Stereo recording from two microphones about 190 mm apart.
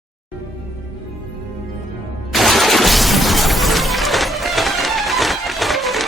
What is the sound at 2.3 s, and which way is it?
Shatter, centre (ahead or behind).